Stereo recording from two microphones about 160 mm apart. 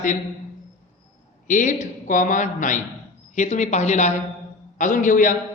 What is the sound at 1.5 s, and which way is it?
A man's voice, 55° left (ahead or behind).